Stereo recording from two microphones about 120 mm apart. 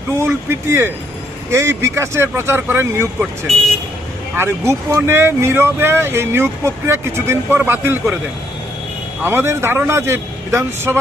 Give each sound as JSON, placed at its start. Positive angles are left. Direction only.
{"t": 0.2, "sound": "speech", "side_deg": -20}
{"t": 4.4, "sound": "speech", "side_deg": -20}
{"t": 9.2, "sound": "speech", "side_deg": -20}